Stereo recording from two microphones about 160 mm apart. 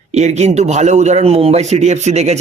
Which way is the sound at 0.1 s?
45° right (ahead or behind).